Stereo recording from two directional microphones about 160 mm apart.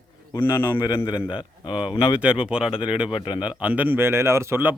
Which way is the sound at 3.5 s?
10° right (ahead or behind).